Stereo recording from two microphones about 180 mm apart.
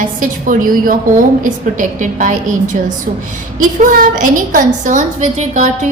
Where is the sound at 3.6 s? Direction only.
50° right (ahead or behind).